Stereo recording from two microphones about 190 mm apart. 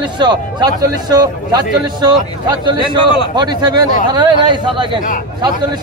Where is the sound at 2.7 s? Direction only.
25° left (ahead or behind).